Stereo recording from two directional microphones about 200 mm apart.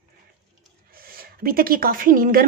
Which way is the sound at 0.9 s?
45° right (ahead or behind).